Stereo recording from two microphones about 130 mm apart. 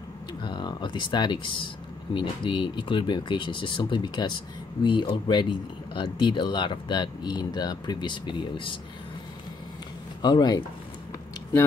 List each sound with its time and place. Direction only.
0.4 s speech: 35° left (ahead or behind)
10.2 s speech: 35° left (ahead or behind)